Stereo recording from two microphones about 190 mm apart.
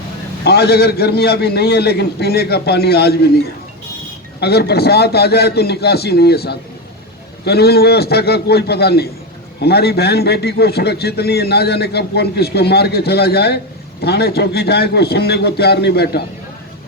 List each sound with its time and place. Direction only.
0.4 s a man's voice: 60° left (ahead or behind)
4.4 s a man's voice: 60° left (ahead or behind)